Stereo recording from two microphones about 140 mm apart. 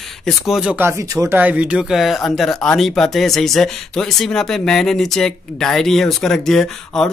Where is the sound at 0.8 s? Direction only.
15° right (ahead or behind).